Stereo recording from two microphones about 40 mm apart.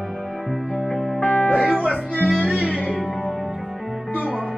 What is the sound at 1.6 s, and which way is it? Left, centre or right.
Music, right.